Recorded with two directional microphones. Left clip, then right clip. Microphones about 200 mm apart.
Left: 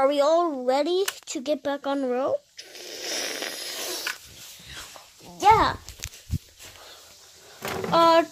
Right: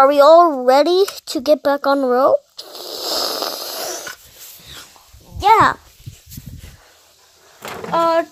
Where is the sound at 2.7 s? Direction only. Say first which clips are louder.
Right 9 dB; 15° right (ahead or behind).